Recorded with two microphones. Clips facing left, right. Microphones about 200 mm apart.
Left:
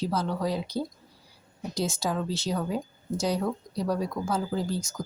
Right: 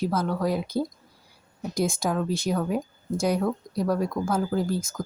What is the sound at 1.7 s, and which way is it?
Speech, 10° right (ahead or behind).